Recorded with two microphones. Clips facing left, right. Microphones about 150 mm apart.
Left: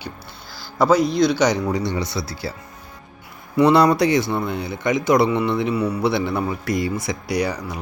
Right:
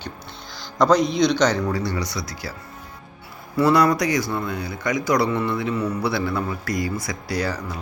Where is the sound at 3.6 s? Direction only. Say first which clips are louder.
Left 3 dB; 20° left (ahead or behind).